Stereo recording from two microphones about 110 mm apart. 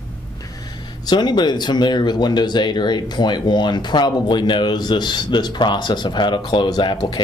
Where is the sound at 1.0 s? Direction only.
40° left (ahead or behind).